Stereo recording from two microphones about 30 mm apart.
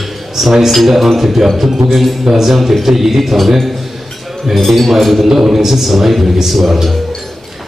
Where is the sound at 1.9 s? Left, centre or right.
Centre.